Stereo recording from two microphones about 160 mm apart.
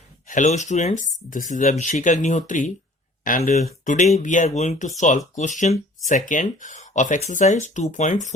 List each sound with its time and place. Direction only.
0.3 s speech: 50° left (ahead or behind)